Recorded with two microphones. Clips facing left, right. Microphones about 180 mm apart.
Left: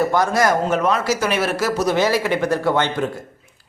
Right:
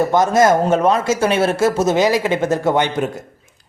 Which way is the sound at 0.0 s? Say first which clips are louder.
Right 4 dB; 20° right (ahead or behind).